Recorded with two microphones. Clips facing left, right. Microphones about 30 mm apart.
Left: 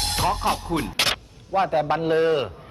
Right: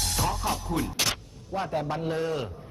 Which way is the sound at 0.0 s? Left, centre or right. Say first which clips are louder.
Left 6 dB; left.